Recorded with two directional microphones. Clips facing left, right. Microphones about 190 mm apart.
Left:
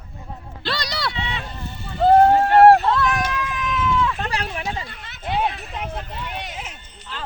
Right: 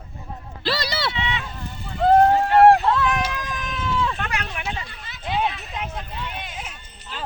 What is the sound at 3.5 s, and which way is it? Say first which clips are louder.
Run: left 6 dB; 35° right (ahead or behind).